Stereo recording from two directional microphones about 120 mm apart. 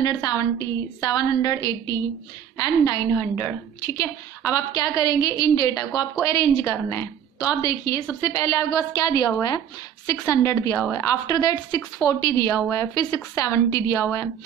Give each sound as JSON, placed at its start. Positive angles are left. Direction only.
{"t": 0.0, "sound": "a woman's voice", "side_deg": 35}
{"t": 3.2, "sound": "a woman's voice", "side_deg": 15}
{"t": 3.9, "sound": "a woman's voice", "side_deg": 25}